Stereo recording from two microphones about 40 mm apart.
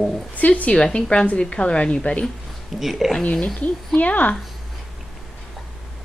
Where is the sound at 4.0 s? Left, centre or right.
Left.